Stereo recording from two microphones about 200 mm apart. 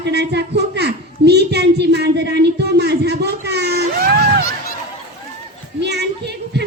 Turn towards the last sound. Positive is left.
turn(degrees=-55)  # may be behind; listen again after turning